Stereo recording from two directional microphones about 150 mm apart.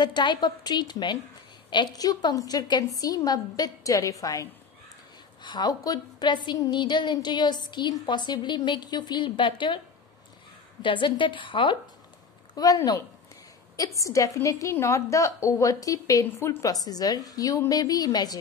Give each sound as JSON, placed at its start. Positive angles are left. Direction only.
{"t": 0.0, "sound": "a woman's voice", "side_deg": 30}
{"t": 10.8, "sound": "a woman's voice", "side_deg": 35}